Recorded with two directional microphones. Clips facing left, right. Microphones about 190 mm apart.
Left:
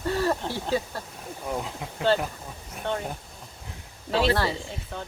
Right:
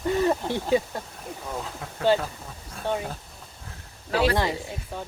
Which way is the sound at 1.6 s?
15° left (ahead or behind).